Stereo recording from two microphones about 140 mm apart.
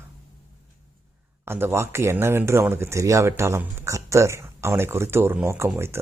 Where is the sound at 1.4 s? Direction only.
15° right (ahead or behind).